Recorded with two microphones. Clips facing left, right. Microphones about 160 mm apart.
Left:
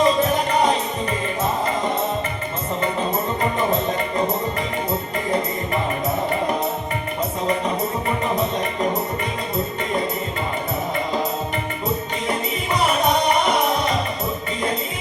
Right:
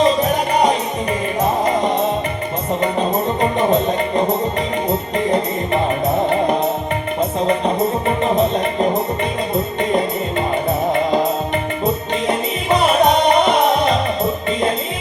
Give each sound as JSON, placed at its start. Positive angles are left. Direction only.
{"t": 0.0, "sound": "music", "side_deg": -15}
{"t": 3.6, "sound": "music", "side_deg": -20}